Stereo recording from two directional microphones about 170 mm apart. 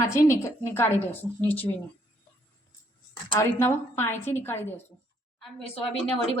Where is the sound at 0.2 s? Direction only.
15° left (ahead or behind).